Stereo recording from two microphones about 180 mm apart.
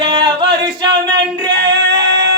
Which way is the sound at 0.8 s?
25° right (ahead or behind).